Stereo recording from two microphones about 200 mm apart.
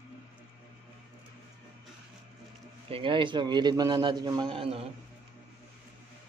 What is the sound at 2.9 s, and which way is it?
A man's voice, 25° right (ahead or behind).